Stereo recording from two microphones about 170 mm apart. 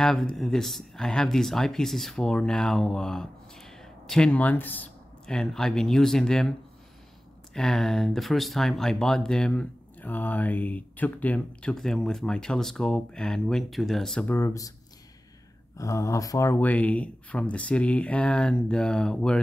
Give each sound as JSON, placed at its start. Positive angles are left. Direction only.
{"t": 0.0, "sound": "speech", "side_deg": 5}
{"t": 7.5, "sound": "speech", "side_deg": 0}
{"t": 14.3, "sound": "speech", "side_deg": 15}
{"t": 15.8, "sound": "speech", "side_deg": 20}